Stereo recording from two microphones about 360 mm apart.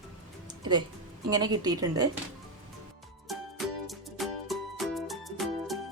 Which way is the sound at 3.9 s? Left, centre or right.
Centre.